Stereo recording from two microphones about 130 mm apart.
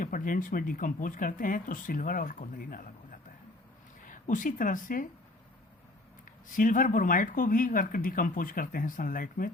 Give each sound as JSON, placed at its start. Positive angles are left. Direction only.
{"t": 0.0, "sound": "speech", "side_deg": 90}
{"t": 6.6, "sound": "speech", "side_deg": 90}